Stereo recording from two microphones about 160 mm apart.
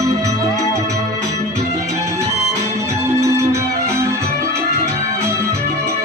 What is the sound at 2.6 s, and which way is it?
Music, 45° right (ahead or behind).